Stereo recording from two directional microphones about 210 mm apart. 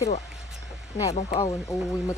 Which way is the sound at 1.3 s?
10° left (ahead or behind).